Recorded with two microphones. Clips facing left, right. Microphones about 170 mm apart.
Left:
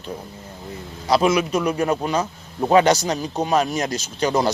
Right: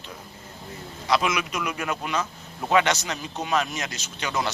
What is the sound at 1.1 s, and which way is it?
A man's voice, 35° left (ahead or behind).